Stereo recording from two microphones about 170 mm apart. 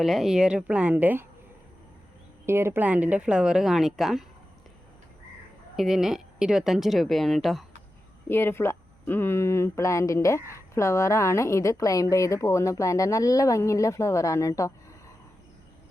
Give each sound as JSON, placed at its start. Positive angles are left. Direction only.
{"t": 0.0, "sound": "a woman's voice", "side_deg": 0}
{"t": 2.5, "sound": "a woman's voice", "side_deg": -15}
{"t": 5.7, "sound": "a woman's voice", "side_deg": 0}
{"t": 8.3, "sound": "a woman's voice", "side_deg": 15}